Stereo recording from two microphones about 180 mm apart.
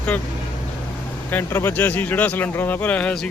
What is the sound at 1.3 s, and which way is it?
Speech, 15° left (ahead or behind).